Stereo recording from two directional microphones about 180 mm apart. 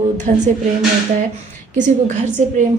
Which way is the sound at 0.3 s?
45° right (ahead or behind).